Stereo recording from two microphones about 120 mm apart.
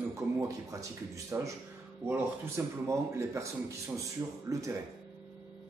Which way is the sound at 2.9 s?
25° right (ahead or behind).